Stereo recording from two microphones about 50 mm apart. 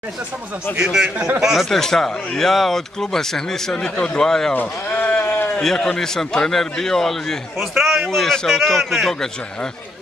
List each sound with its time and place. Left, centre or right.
0.7 s a man's voice: right
1.4 s a man's voice: centre
1.7 s speech: centre
4.6 s a sound: left
5.6 s speech: centre
7.5 s a man's voice: centre